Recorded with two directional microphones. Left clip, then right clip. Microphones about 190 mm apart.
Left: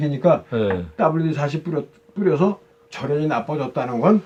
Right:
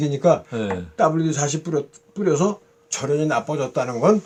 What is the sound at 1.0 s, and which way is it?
Speech, 45° right (ahead or behind).